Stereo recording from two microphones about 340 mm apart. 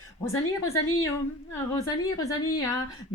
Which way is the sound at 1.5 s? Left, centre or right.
Centre.